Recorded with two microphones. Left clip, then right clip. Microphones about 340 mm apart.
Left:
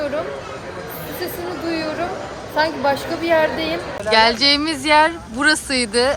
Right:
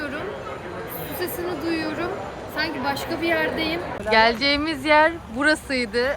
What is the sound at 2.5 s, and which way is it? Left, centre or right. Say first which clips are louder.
A woman's voice: left 8 dB; centre.